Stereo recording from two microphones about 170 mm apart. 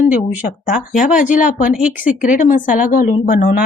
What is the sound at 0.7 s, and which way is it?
Speech, 50° left (ahead or behind).